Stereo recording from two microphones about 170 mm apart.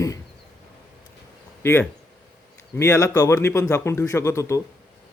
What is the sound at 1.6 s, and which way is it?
Speech, 15° left (ahead or behind).